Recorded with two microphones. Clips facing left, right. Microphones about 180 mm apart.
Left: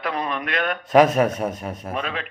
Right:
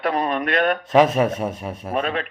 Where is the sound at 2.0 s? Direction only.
35° right (ahead or behind).